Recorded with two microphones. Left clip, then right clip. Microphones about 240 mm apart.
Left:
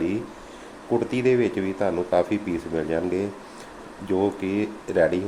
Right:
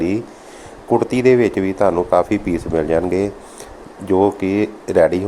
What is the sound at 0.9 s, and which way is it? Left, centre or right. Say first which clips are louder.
Speech: right 8 dB; right.